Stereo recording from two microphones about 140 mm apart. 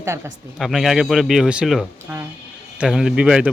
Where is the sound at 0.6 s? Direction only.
Centre (ahead or behind).